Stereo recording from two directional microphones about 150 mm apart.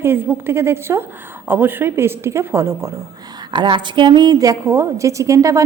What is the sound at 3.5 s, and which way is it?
A woman's voice, 30° right (ahead or behind).